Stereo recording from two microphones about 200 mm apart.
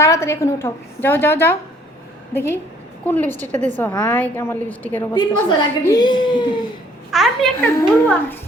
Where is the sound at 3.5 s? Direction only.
35° right (ahead or behind).